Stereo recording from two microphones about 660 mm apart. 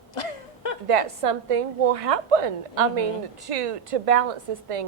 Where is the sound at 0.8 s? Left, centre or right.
Right.